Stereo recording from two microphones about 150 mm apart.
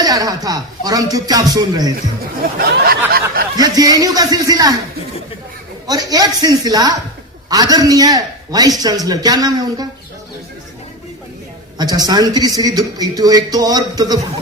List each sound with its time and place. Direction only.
0.0 s a man's voice: 25° right (ahead or behind)
2.0 s speech: 75° right (ahead or behind)
3.6 s a man's voice: 25° right (ahead or behind)
5.9 s a man's voice: 25° right (ahead or behind)
11.8 s a man's voice: 25° right (ahead or behind)